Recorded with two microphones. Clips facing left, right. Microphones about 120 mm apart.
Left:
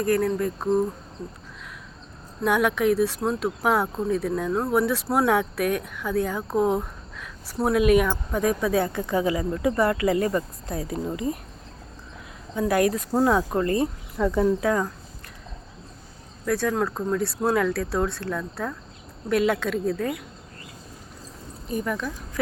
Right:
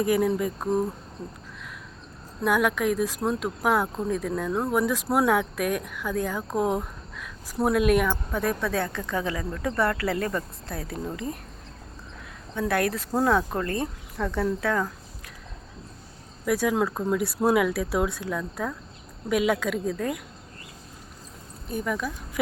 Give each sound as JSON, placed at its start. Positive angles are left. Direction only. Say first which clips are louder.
{"t": 0.0, "sound": "speech", "louder": "even", "side_deg": -10}
{"t": 2.4, "sound": "speech", "louder": "left 2 dB", "side_deg": 0}
{"t": 12.5, "sound": "speech", "louder": "left 4 dB", "side_deg": 5}
{"t": 16.5, "sound": "speech", "louder": "even", "side_deg": -10}
{"t": 21.7, "sound": "speech", "louder": "left 1 dB", "side_deg": 0}